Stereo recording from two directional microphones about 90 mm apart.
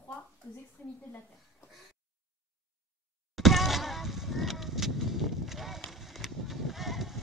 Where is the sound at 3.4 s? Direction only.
Centre (ahead or behind).